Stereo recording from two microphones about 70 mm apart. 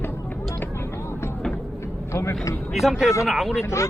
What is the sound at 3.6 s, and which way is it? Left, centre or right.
Speech, left.